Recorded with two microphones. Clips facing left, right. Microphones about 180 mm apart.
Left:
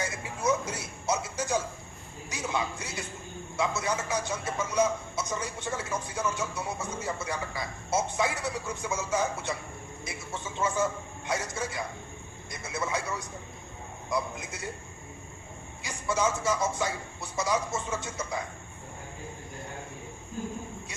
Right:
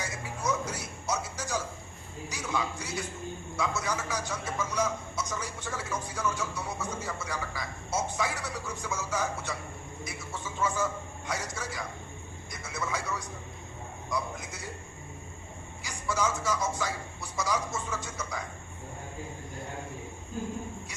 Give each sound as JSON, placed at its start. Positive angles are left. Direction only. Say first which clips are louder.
{"t": 0.4, "sound": "a sound", "louder": "left 4 dB", "side_deg": 25}
{"t": 2.3, "sound": "a man's voice", "louder": "left 1 dB", "side_deg": 25}
{"t": 15.8, "sound": "a man's voice", "louder": "left 2 dB", "side_deg": 25}